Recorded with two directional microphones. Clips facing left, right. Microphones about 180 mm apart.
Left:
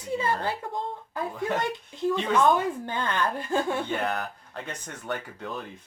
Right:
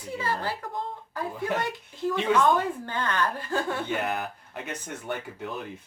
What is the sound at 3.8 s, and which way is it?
Speech, 10° right (ahead or behind).